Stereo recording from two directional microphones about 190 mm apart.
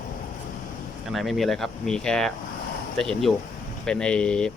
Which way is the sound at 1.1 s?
Centre (ahead or behind).